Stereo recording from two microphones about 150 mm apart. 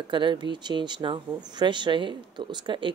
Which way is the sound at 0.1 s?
30° right (ahead or behind).